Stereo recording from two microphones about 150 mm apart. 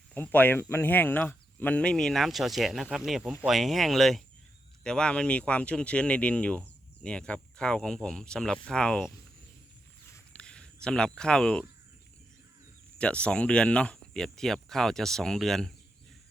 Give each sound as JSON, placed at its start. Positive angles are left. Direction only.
{"t": 0.1, "sound": "speech", "side_deg": 10}
{"t": 10.3, "sound": "a sound", "side_deg": 5}
{"t": 13.0, "sound": "speech", "side_deg": 10}